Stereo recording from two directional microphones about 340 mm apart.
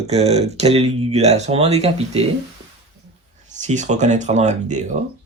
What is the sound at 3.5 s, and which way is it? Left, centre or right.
Speech, right.